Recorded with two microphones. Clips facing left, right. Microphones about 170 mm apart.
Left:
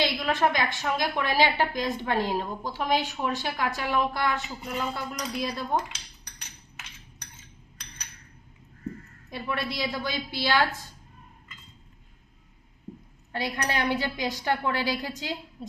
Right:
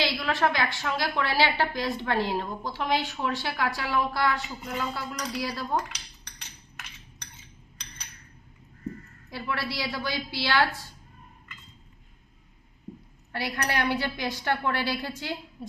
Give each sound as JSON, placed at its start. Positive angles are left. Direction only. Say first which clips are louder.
{"t": 0.0, "sound": "a woman's voice", "louder": "left 1 dB", "side_deg": 20}
{"t": 9.3, "sound": "a woman's voice", "louder": "left 1 dB", "side_deg": 20}
{"t": 13.3, "sound": "a woman's voice", "louder": "even", "side_deg": 20}